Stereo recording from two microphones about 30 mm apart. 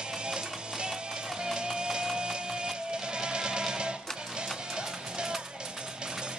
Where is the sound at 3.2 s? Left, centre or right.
Right.